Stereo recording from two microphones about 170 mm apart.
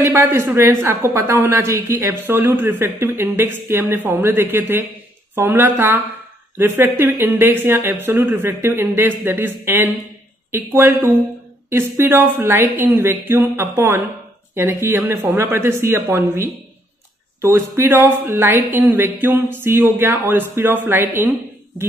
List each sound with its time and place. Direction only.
0.0 s a woman's voice: 15° right (ahead or behind)